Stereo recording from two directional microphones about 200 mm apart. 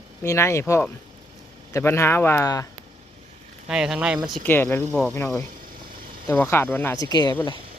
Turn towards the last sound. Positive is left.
turn(degrees=20)  # may be behind; listen again after turning